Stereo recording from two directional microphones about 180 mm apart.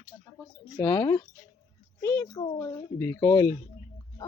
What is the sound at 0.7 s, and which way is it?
A child's voice, 15° left (ahead or behind).